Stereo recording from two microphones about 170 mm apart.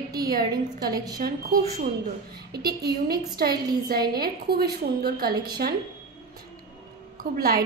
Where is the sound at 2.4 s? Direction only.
70° right (ahead or behind).